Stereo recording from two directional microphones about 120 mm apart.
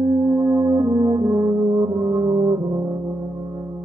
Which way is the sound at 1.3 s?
25° right (ahead or behind).